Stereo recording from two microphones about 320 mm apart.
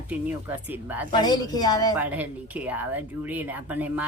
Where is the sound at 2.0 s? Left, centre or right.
Centre.